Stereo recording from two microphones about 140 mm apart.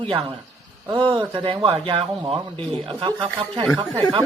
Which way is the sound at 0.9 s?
35° right (ahead or behind).